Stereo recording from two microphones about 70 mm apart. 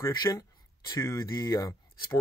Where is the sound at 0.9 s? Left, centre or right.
Left.